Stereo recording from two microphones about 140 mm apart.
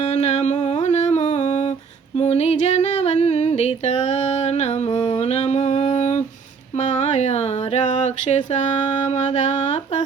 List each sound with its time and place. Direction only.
0.0 s humming: 50° left (ahead or behind)
2.1 s music: 50° left (ahead or behind)
6.7 s a sound: 55° left (ahead or behind)